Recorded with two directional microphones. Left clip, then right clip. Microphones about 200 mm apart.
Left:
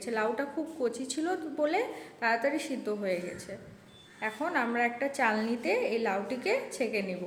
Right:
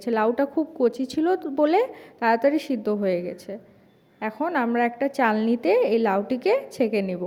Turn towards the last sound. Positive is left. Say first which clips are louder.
# right 8 dB
turn(degrees=-45)  # may be behind; listen again after turning